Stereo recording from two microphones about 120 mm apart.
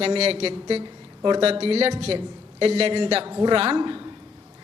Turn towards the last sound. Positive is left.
turn(degrees=-40)  # may be behind; listen again after turning